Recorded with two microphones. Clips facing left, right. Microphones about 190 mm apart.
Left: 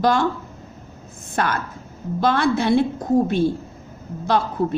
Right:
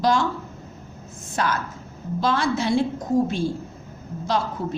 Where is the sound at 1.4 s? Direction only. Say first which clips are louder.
Left 2 dB; 55° left (ahead or behind).